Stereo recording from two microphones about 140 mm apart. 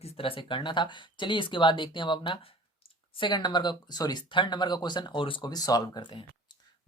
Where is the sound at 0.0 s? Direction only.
40° left (ahead or behind).